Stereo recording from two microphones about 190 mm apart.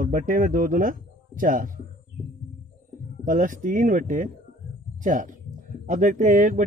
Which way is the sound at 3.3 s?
45° right (ahead or behind).